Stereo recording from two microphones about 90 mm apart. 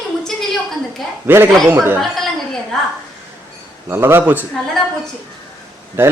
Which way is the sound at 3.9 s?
25° right (ahead or behind).